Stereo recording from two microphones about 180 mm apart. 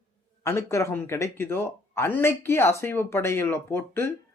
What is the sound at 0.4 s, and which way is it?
A man's voice, 15° left (ahead or behind).